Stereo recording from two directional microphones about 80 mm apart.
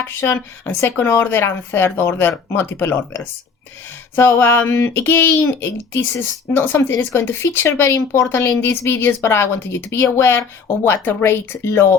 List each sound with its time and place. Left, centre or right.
0.0 s speech: left
4.4 s speech: left
5.3 s speech: left
8.6 s speech: left